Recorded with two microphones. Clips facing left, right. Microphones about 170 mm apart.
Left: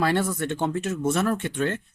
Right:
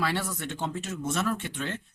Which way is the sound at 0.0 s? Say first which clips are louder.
Left 7 dB; 50° left (ahead or behind).